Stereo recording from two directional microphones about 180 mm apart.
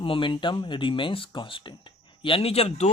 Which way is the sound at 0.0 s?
30° left (ahead or behind).